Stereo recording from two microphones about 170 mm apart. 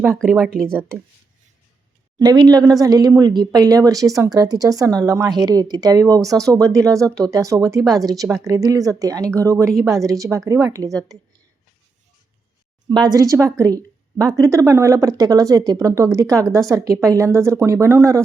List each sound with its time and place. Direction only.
0.7 s speech: 15° right (ahead or behind)
2.1 s speech: 25° right (ahead or behind)
12.9 s speech: 25° right (ahead or behind)